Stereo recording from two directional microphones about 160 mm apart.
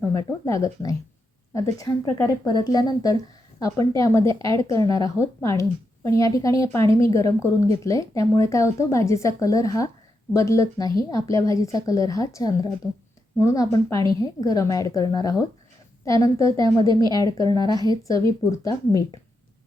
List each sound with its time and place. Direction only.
0.0 s a woman's voice: 20° left (ahead or behind)